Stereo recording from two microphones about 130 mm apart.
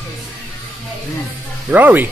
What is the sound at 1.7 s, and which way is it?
Speech, 15° right (ahead or behind).